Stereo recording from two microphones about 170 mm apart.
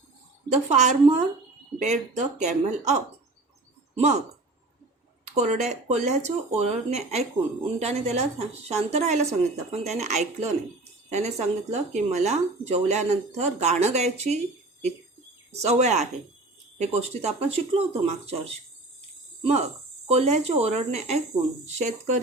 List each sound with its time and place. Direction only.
0.5 s speech: 45° right (ahead or behind)
5.3 s speech: 40° right (ahead or behind)
15.5 s speech: 40° right (ahead or behind)
20.1 s speech: 40° right (ahead or behind)